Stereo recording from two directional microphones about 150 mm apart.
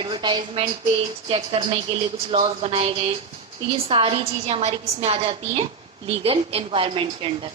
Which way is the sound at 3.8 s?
40° right (ahead or behind).